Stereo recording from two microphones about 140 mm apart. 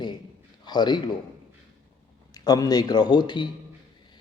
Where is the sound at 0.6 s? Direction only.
30° left (ahead or behind).